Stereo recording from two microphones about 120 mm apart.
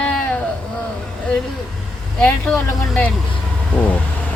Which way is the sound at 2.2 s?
10° left (ahead or behind).